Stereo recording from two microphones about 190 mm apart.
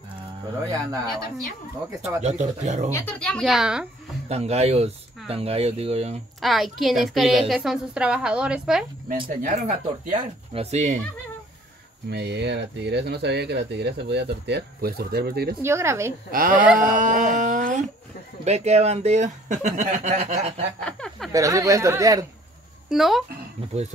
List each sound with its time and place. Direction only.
2.0 s speech: 35° right (ahead or behind)
2.9 s a woman's voice: 10° left (ahead or behind)
4.3 s speech: 35° right (ahead or behind)
6.4 s a woman's voice: centre (ahead or behind)
9.3 s speech: 45° right (ahead or behind)
12.1 s speech: 60° right (ahead or behind)
15.6 s speech: 15° right (ahead or behind)
16.3 s speech: 45° right (ahead or behind)
20.8 s speech: 5° left (ahead or behind)
21.3 s speech: 15° right (ahead or behind)
22.8 s a woman's voice: centre (ahead or behind)